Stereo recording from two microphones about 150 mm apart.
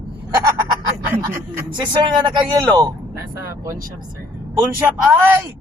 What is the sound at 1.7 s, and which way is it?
Speech, 30° right (ahead or behind).